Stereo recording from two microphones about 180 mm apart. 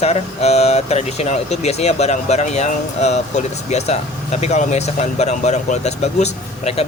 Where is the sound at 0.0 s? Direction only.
35° left (ahead or behind).